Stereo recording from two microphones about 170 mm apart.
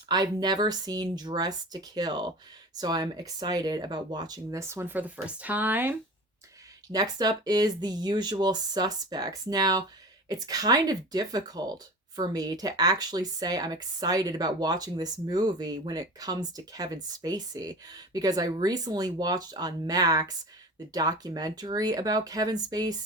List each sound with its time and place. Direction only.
0.1 s speech: 25° right (ahead or behind)
6.8 s speech: 20° right (ahead or behind)